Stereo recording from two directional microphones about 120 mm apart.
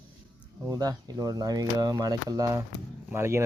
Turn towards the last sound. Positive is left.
turn(degrees=-20)  # may be behind; listen again after turning